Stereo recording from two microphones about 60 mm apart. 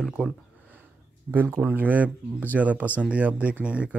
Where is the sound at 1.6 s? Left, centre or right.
Right.